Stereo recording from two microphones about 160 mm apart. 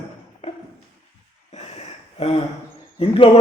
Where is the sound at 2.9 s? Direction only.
35° left (ahead or behind).